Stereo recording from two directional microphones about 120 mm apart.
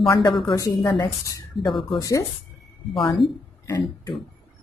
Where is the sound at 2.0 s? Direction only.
30° left (ahead or behind).